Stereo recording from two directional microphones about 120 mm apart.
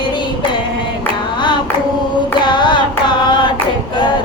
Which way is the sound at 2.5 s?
40° left (ahead or behind).